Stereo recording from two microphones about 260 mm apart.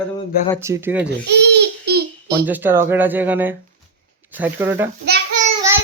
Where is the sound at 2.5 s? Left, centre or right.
Centre.